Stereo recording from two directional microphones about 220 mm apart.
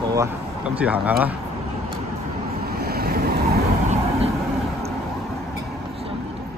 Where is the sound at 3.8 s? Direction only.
30° right (ahead or behind).